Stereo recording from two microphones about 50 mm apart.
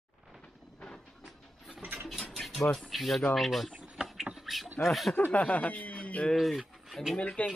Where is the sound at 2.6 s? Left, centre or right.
Centre.